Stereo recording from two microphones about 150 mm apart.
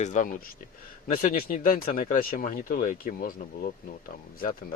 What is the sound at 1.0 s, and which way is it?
Speech, 70° left (ahead or behind).